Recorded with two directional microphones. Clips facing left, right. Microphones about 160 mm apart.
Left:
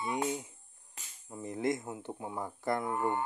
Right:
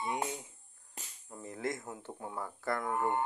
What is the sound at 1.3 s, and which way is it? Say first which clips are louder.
Speech: left 5 dB; 15° left (ahead or behind).